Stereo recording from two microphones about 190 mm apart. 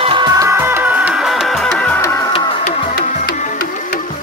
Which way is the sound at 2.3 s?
30° left (ahead or behind).